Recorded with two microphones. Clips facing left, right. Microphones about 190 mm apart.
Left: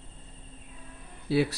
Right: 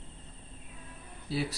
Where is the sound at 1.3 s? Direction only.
65° left (ahead or behind).